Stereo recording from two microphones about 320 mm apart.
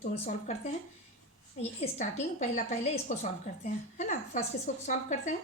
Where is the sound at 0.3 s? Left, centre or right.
Left.